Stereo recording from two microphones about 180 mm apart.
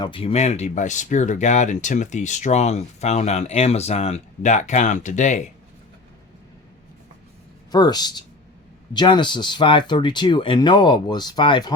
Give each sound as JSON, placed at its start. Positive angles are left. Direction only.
{"t": 0.0, "sound": "speech", "side_deg": 30}
{"t": 7.7, "sound": "speech", "side_deg": 20}